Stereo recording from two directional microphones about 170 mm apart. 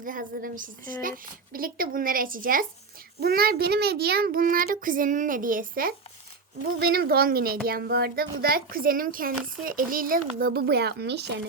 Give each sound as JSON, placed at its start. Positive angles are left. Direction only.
{"t": 0.0, "sound": "a woman's voice", "side_deg": -55}